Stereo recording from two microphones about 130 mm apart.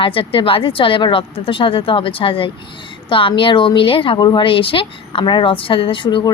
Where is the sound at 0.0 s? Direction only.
45° left (ahead or behind).